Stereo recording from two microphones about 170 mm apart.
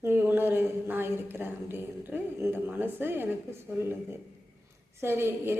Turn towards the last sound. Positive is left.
turn(degrees=-15)  # may be behind; listen again after turning